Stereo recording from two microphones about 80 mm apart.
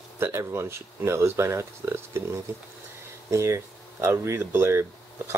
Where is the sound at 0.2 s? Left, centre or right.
Right.